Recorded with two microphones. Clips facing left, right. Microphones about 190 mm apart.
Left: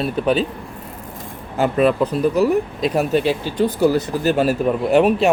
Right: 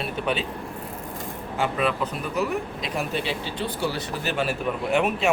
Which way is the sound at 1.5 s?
40° left (ahead or behind).